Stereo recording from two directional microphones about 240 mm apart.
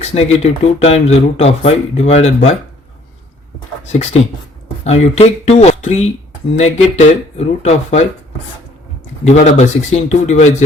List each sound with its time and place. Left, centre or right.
0.0 s speech: left
4.8 s speech: left
9.2 s speech: left